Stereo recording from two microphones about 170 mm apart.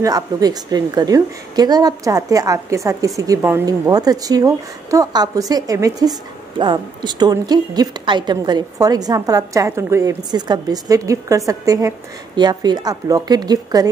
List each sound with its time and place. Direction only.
0.0 s a woman's voice: 20° right (ahead or behind)